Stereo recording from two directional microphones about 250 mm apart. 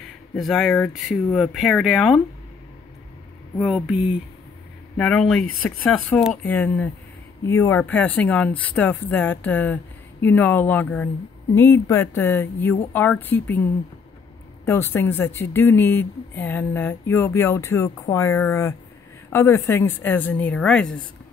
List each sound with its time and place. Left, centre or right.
0.4 s speech: centre
3.5 s speech: centre
5.5 s speech: left
5.9 s speech: centre